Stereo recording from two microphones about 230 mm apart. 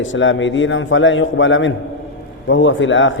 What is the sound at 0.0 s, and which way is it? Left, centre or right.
Speech, left.